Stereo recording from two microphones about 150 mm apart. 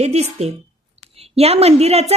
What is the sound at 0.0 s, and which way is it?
A woman's voice, 45° right (ahead or behind).